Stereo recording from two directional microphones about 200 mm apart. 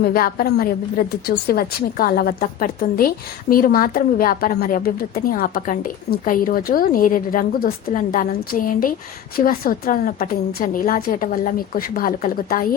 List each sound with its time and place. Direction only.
0.0 s a woman's voice: 45° left (ahead or behind)